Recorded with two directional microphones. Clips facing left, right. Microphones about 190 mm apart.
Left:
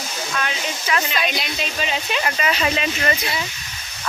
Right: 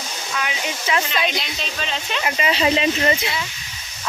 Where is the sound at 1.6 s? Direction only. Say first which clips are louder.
Left 3 dB; 10° left (ahead or behind).